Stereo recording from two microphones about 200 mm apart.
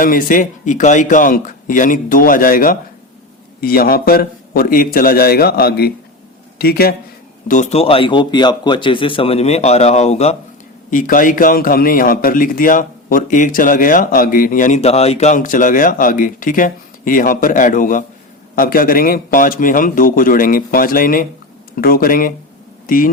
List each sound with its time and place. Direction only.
0.0 s a man's voice: 45° left (ahead or behind)
7.4 s a man's voice: 40° left (ahead or behind)